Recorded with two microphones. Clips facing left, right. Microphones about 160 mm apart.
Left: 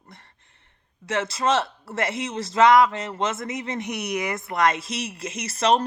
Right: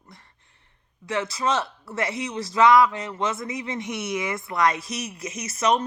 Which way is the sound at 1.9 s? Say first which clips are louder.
Left 1 dB; 55° left (ahead or behind).